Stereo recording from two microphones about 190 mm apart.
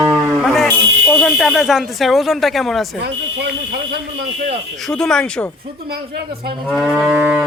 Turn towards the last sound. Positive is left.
turn(degrees=-5)  # may be behind; listen again after turning